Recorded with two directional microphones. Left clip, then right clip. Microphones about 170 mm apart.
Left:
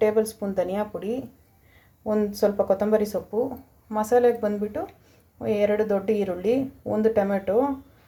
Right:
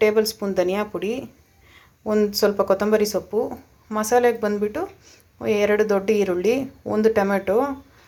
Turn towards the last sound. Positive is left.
turn(degrees=0)  # may be behind; listen again after turning